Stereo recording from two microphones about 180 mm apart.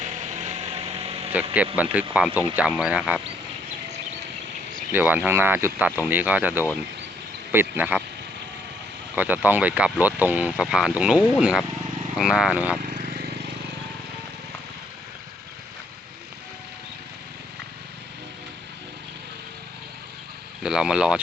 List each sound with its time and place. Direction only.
0.0 s a sound: 40° right (ahead or behind)
1.3 s speech: 10° right (ahead or behind)
4.9 s speech: 10° right (ahead or behind)
9.1 s speech: 10° right (ahead or behind)
12.8 s vehicle: 55° right (ahead or behind)
20.6 s speech: 5° right (ahead or behind)